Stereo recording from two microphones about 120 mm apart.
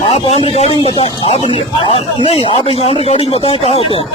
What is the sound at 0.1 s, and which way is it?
A man's voice, 55° left (ahead or behind).